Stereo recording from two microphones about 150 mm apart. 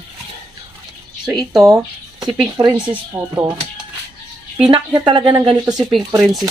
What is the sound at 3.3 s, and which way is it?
Speech, 20° right (ahead or behind).